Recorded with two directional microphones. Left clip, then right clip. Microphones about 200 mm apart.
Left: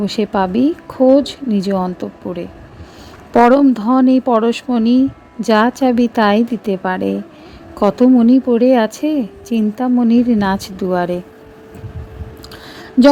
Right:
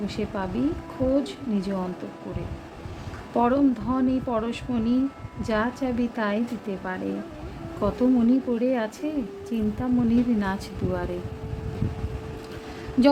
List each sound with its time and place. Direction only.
0.0 s a woman's voice: 45° left (ahead or behind)
3.3 s a woman's voice: 40° left (ahead or behind)